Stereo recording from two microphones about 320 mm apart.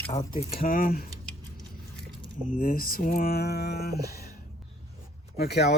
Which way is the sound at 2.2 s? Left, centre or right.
Left.